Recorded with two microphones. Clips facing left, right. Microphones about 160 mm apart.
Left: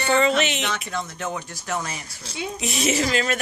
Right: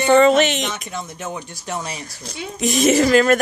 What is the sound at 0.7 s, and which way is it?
Speech, 15° right (ahead or behind).